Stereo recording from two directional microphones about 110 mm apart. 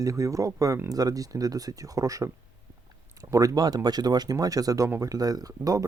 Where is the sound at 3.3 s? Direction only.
30° right (ahead or behind).